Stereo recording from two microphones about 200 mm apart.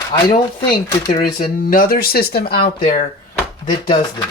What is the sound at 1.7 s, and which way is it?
Speech, 45° left (ahead or behind).